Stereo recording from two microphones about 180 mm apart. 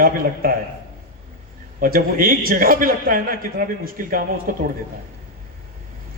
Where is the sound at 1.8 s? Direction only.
50° right (ahead or behind).